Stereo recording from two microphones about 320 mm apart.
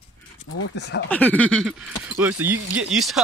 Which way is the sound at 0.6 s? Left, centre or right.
Left.